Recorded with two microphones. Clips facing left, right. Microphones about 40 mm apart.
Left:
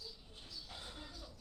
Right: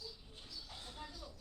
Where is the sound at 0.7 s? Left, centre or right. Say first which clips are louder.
Left 3 dB; centre.